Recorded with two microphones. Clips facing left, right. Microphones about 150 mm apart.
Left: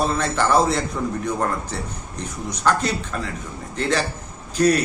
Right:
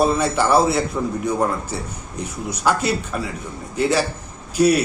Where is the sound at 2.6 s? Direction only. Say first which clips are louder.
Right 1 dB; 10° right (ahead or behind).